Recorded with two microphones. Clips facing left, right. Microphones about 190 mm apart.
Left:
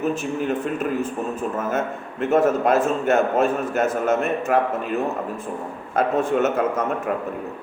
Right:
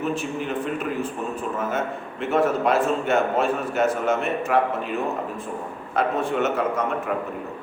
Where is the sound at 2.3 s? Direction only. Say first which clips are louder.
Left 3 dB; 45° left (ahead or behind).